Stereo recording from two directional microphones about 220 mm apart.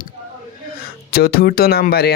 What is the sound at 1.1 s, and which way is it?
Speech, 45° left (ahead or behind).